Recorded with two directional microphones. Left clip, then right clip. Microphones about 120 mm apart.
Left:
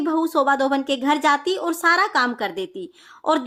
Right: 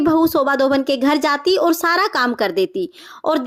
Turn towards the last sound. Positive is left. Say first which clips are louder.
# right 2 dB
turn(degrees=-40)  # may be behind; listen again after turning